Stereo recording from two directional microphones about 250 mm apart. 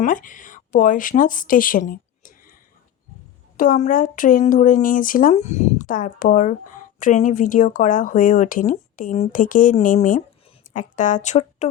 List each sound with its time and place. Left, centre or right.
0.0 s a woman's voice: left
3.6 s speech: left